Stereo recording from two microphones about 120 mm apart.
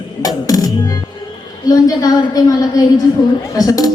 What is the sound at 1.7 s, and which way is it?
A woman's voice, 30° left (ahead or behind).